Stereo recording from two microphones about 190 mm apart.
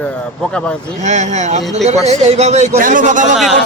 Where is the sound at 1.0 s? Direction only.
35° right (ahead or behind).